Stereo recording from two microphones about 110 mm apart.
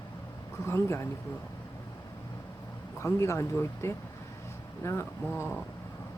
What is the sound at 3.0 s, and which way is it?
Speech, 25° left (ahead or behind).